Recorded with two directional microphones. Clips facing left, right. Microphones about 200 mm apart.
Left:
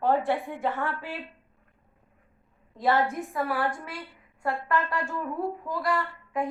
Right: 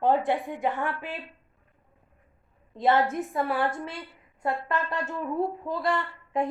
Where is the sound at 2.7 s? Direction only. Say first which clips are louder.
Right 2 dB; 20° right (ahead or behind).